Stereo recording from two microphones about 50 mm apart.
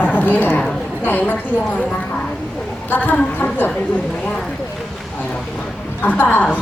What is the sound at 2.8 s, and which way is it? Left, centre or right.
Speech, left.